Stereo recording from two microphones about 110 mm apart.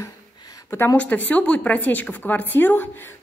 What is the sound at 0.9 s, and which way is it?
A woman's voice, 15° left (ahead or behind).